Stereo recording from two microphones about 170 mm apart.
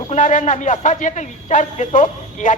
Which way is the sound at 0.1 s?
50° left (ahead or behind).